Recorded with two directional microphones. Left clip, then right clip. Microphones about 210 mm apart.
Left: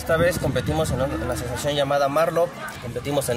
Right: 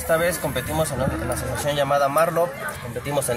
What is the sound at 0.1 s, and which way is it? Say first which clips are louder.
Speech: left 1 dB; 25° left (ahead or behind).